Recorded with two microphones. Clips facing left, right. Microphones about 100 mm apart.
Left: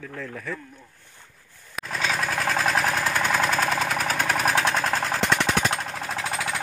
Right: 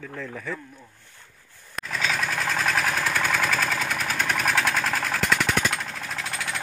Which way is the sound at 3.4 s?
25° left (ahead or behind).